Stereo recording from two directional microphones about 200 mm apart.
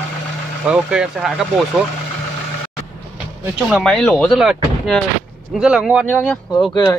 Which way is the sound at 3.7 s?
Centre (ahead or behind).